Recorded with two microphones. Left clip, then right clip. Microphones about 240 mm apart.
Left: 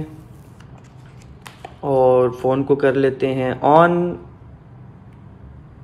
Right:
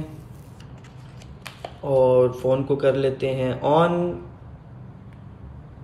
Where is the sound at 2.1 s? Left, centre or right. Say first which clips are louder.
Left 2 dB; centre.